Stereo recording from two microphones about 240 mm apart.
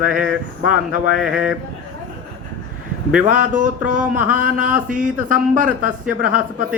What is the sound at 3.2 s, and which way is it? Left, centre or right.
Speech, right.